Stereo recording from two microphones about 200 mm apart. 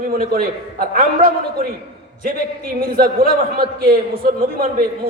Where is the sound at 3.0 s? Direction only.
45° right (ahead or behind).